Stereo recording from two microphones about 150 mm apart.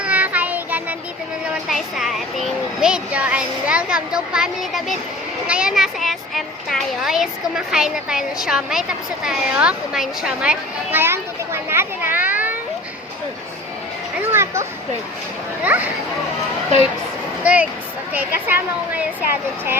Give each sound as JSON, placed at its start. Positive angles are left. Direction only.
{"t": 0.0, "sound": "child singing", "side_deg": -10}
{"t": 1.7, "sound": "a child's voice", "side_deg": 0}
{"t": 14.2, "sound": "a sound", "side_deg": -15}
{"t": 15.6, "sound": "speech", "side_deg": -10}
{"t": 17.4, "sound": "speech", "side_deg": -10}